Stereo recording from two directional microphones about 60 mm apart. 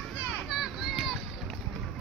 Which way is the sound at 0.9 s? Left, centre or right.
Centre.